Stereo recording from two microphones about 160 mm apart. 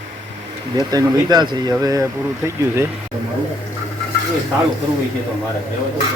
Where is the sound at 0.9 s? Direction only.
25° right (ahead or behind).